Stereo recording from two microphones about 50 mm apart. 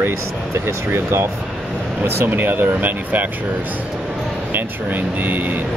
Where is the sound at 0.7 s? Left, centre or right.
Right.